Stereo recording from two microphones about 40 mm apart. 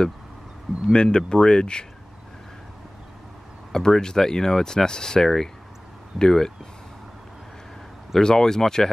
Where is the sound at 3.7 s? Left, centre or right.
Centre.